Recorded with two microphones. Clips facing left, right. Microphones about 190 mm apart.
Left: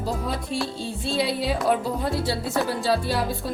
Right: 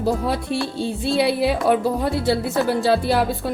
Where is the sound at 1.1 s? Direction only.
65° right (ahead or behind).